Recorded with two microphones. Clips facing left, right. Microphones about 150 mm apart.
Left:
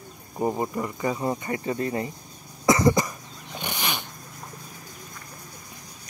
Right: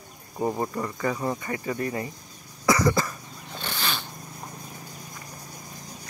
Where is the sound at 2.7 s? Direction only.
20° left (ahead or behind).